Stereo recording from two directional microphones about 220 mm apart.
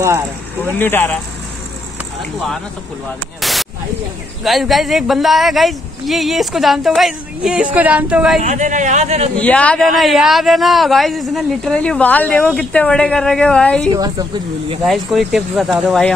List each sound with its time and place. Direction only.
0.7 s speech: 10° left (ahead or behind)
3.3 s a sound: centre (ahead or behind)
4.5 s a man's voice: centre (ahead or behind)
8.4 s a man's voice: 35° right (ahead or behind)
9.4 s a man's voice: 5° left (ahead or behind)
14.9 s a man's voice: centre (ahead or behind)